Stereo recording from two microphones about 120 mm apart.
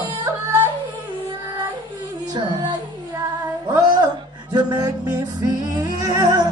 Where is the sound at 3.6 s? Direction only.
35° right (ahead or behind).